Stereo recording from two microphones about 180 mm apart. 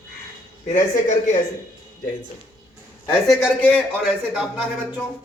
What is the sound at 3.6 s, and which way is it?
Speech, 5° left (ahead or behind).